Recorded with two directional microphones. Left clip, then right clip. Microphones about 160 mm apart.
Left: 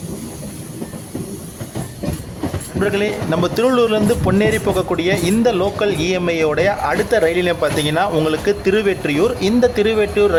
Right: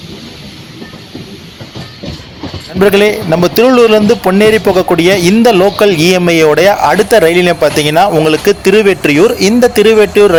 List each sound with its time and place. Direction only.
2.8 s a man's voice: 35° right (ahead or behind)